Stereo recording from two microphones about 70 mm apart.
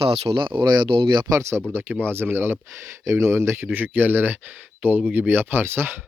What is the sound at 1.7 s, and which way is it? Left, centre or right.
Speech, right.